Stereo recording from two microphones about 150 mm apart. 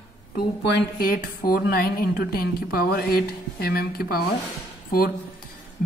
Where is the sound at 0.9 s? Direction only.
75° left (ahead or behind).